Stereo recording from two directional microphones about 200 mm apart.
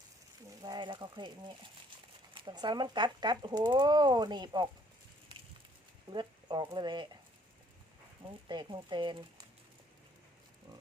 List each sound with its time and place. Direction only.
0.6 s speech: 20° right (ahead or behind)
2.3 s speech: 25° right (ahead or behind)
6.1 s speech: 20° right (ahead or behind)
8.3 s speech: 20° right (ahead or behind)